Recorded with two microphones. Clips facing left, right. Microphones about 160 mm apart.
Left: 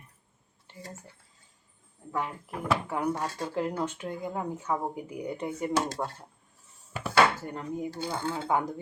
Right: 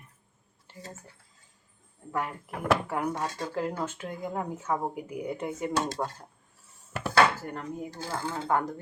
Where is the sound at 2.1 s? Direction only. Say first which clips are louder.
Even; centre (ahead or behind).